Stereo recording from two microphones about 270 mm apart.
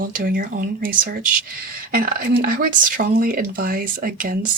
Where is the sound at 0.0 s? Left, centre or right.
Right.